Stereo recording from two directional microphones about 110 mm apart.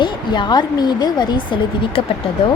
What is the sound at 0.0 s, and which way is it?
A woman's voice, 40° left (ahead or behind).